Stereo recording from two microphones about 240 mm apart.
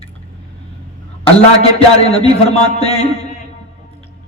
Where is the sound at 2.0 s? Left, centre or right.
Left.